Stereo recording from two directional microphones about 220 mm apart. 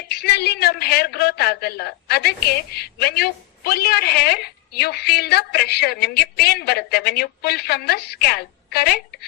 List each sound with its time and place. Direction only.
0.1 s a woman's voice: 50° left (ahead or behind)